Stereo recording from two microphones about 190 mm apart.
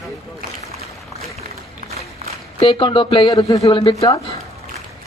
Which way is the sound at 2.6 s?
25° left (ahead or behind).